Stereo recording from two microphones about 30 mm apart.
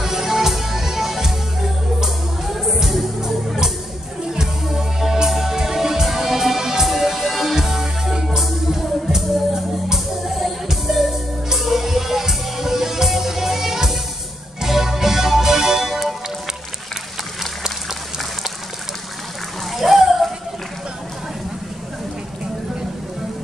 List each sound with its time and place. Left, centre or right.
0.0 s music: centre
8.4 s music: centre
10.2 s music: centre
17.6 s a sound: centre
19.7 s splash: centre